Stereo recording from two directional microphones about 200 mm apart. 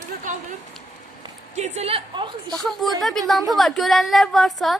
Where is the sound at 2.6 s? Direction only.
Centre (ahead or behind).